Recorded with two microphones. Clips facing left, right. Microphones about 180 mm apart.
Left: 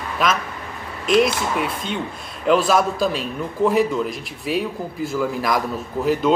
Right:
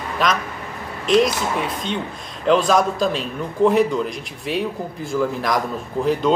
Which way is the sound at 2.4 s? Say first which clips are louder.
Right 1 dB; 5° left (ahead or behind).